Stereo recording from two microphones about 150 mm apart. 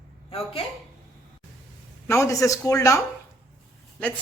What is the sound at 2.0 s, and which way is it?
Speech, 20° left (ahead or behind).